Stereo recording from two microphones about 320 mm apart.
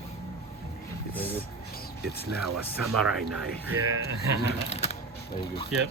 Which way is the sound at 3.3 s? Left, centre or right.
Right.